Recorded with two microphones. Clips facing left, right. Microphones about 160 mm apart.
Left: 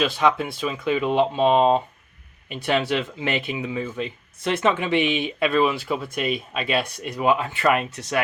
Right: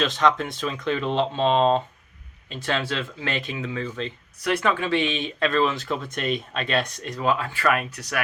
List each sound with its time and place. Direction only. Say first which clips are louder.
0.0 s speech: left 1 dB; 10° left (ahead or behind)
4.4 s speech: left 2 dB; 25° left (ahead or behind)